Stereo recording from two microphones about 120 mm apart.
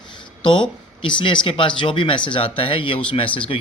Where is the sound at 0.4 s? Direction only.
45° left (ahead or behind).